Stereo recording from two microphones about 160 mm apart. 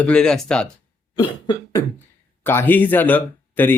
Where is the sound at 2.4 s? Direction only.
10° left (ahead or behind).